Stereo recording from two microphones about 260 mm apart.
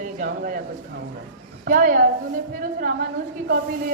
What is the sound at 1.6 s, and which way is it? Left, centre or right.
A man's voice, right.